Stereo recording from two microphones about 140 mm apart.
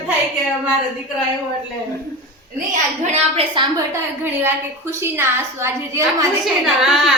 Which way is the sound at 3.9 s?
15° right (ahead or behind).